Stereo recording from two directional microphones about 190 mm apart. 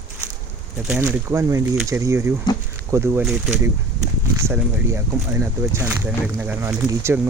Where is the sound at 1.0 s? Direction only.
15° right (ahead or behind).